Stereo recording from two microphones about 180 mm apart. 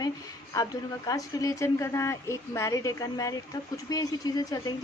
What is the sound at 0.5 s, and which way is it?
A woman's voice, 20° left (ahead or behind).